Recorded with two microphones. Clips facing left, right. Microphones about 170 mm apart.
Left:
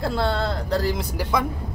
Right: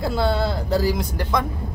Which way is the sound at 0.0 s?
Centre (ahead or behind).